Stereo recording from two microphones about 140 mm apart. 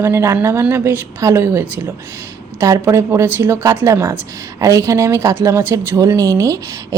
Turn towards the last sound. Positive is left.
turn(degrees=-25)  # may be behind; listen again after turning